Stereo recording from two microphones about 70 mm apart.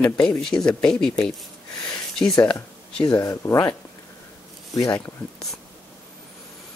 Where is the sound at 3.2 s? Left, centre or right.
Left.